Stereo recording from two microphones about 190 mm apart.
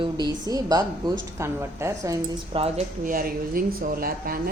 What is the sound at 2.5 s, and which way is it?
A woman's voice, 35° right (ahead or behind).